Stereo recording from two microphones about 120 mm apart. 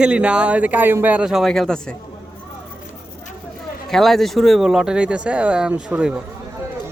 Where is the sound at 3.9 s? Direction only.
Centre (ahead or behind).